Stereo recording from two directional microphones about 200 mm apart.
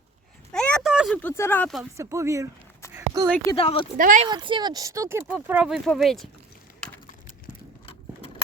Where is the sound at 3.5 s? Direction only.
25° left (ahead or behind).